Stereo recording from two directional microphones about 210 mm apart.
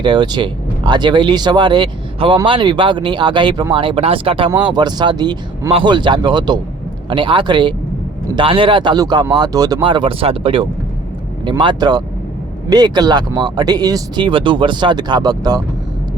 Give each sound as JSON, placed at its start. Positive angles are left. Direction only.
{"t": 0.0, "sound": "speech", "side_deg": -20}